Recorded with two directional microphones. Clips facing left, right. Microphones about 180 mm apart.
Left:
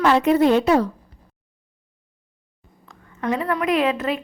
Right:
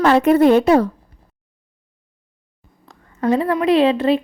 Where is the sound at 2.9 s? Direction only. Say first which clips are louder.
Right 6 dB; 35° right (ahead or behind).